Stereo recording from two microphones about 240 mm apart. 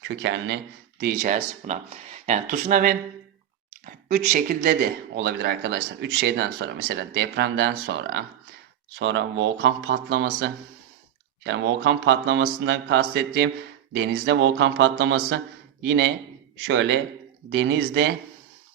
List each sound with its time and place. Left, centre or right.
0.2 s speech: right